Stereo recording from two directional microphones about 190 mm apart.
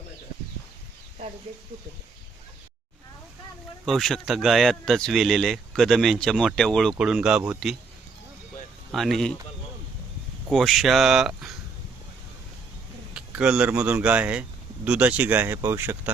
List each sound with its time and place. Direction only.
3.8 s speech: centre (ahead or behind)
8.9 s speech: centre (ahead or behind)
10.5 s speech: centre (ahead or behind)
13.1 s speech: 5° right (ahead or behind)